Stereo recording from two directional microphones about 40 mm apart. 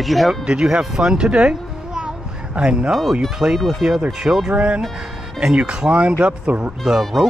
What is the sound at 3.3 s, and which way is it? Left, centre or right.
A child's voice, centre.